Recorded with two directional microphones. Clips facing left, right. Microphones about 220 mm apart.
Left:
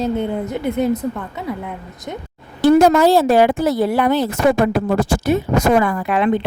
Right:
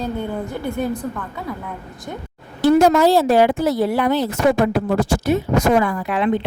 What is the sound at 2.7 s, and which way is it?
A woman's voice, 50° left (ahead or behind).